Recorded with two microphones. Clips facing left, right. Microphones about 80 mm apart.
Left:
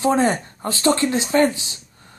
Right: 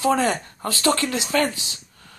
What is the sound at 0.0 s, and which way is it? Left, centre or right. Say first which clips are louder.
A man's voice: left 2 dB; left.